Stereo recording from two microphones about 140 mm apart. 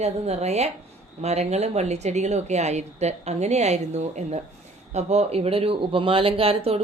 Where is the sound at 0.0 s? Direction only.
50° right (ahead or behind).